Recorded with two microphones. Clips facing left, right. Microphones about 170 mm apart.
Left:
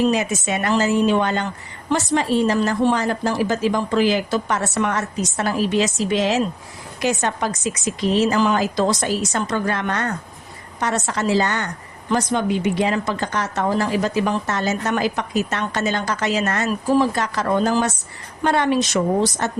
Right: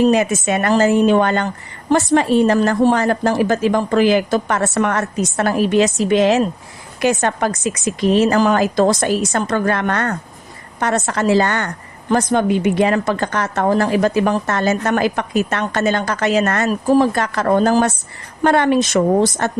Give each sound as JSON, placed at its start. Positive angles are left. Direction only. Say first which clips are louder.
{"t": 0.1, "sound": "a woman's voice", "louder": "right 5 dB", "side_deg": -55}